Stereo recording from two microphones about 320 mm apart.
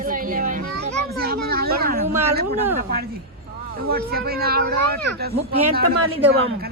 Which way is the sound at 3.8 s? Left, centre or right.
Right.